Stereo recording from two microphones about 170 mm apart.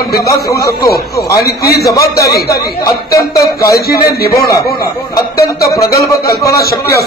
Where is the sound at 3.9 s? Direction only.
65° left (ahead or behind).